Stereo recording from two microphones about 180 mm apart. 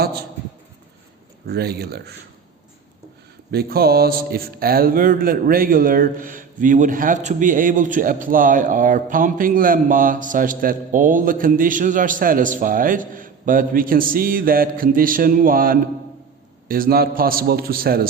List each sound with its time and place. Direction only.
1.5 s a man's voice: 60° right (ahead or behind)
3.5 s a man's voice: 55° right (ahead or behind)